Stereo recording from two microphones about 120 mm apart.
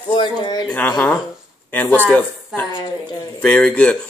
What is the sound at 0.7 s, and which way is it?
Speech, 10° left (ahead or behind).